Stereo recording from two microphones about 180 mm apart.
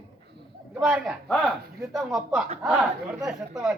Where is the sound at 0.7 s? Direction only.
5° right (ahead or behind).